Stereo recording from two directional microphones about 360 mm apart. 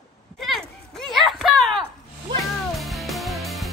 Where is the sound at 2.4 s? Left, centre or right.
Centre.